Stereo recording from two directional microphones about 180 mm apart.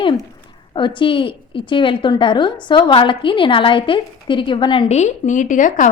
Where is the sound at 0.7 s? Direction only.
25° left (ahead or behind).